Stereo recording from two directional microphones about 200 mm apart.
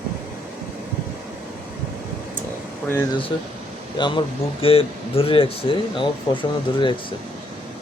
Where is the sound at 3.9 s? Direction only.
25° left (ahead or behind).